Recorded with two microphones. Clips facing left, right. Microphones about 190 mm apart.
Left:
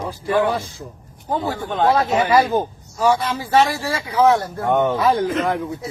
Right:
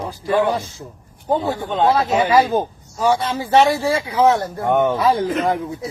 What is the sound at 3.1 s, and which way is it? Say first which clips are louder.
Speech: right 1 dB; 30° right (ahead or behind).